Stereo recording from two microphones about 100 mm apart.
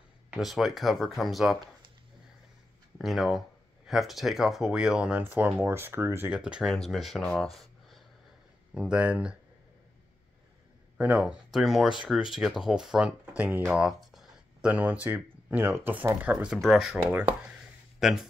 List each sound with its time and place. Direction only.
0.4 s speech: centre (ahead or behind)
3.0 s speech: centre (ahead or behind); by 6.3 s 25° right (ahead or behind)
6.3 s speech: 10° right (ahead or behind)
7.2 s a sound: 5° left (ahead or behind)
8.7 s speech: 10° right (ahead or behind)
11.0 s speech: 10° right (ahead or behind)
13.7 s a sound: 5° right (ahead or behind)
14.7 s speech: 15° right (ahead or behind)
17.1 s a sound: 20° right (ahead or behind)
17.9 s speech: 5° right (ahead or behind)